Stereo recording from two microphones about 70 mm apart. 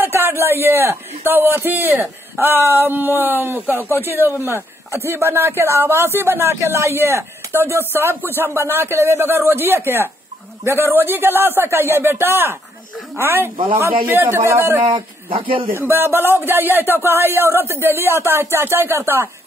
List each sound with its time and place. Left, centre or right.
0.0 s a man's voice: right